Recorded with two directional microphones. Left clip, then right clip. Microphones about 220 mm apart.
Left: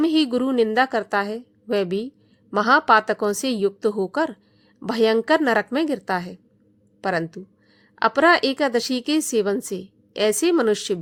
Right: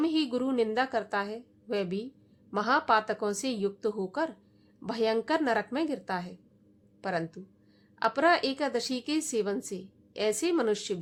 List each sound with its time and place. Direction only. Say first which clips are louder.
0.0 s a woman's voice: left 9 dB; 35° left (ahead or behind)